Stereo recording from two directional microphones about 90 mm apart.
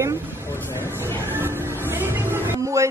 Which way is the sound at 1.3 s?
25° right (ahead or behind).